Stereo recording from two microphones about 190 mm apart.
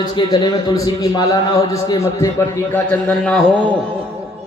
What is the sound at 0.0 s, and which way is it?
A man's voice, 20° left (ahead or behind).